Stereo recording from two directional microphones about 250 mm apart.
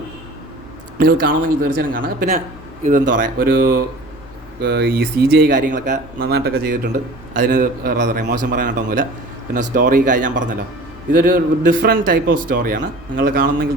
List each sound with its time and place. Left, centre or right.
0.9 s speech: right